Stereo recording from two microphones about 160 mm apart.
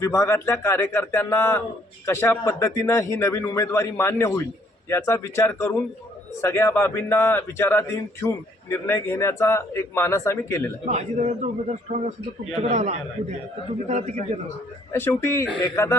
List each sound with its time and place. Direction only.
0.0 s a man's voice: 20° left (ahead or behind)
10.8 s a man's voice: 50° right (ahead or behind)
14.9 s a man's voice: 15° left (ahead or behind)